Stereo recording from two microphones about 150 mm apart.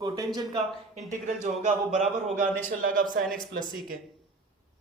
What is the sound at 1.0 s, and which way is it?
Speech, 55° right (ahead or behind).